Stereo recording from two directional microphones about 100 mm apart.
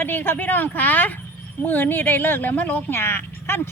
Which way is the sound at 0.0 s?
20° left (ahead or behind).